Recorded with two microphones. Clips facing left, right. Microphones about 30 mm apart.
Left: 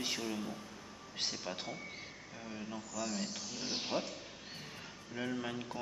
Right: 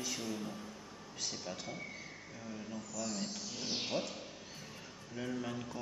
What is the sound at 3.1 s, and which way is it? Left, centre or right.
A man's voice, left.